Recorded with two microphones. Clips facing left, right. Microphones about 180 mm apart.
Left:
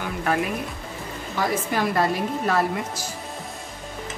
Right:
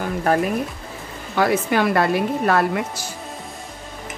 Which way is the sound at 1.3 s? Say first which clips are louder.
Right 6 dB; 65° right (ahead or behind).